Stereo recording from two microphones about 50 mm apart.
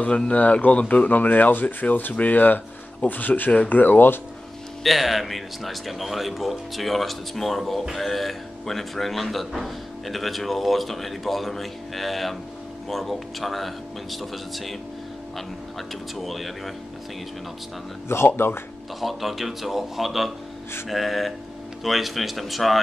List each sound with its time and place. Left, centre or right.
0.0 s speech: left
4.8 s a man's voice: centre
16.2 s a man's voice: centre
18.0 s speech: left
18.9 s a man's voice: centre